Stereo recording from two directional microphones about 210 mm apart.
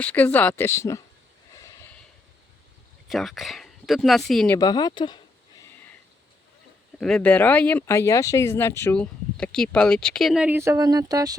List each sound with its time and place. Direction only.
0.0 s speech: 5° left (ahead or behind)
3.1 s speech: centre (ahead or behind)
4.5 s speech: 20° left (ahead or behind)
7.0 s speech: 5° left (ahead or behind); by 11.3 s 15° right (ahead or behind)